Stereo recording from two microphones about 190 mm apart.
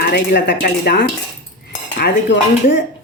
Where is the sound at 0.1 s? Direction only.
60° left (ahead or behind).